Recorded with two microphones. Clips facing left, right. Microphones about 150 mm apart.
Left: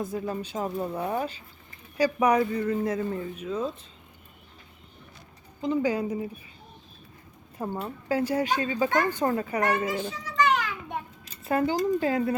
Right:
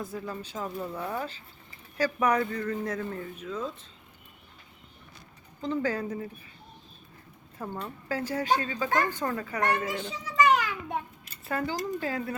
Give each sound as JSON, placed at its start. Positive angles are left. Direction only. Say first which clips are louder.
{"t": 0.0, "sound": "speech", "louder": "left 5 dB", "side_deg": 20}
{"t": 5.6, "sound": "speech", "louder": "left 4 dB", "side_deg": 15}
{"t": 7.9, "sound": "speech", "louder": "left 7 dB", "side_deg": 15}
{"t": 10.1, "sound": "children playing", "louder": "right 4 dB", "side_deg": -5}
{"t": 11.5, "sound": "speech", "louder": "left 7 dB", "side_deg": 20}